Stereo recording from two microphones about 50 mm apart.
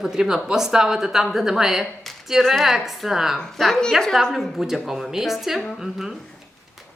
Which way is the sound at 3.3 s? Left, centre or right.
Centre.